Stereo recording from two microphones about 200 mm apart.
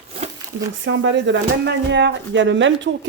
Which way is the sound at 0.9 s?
70° right (ahead or behind).